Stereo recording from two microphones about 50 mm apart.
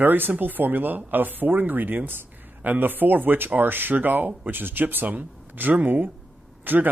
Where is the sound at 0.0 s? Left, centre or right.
Right.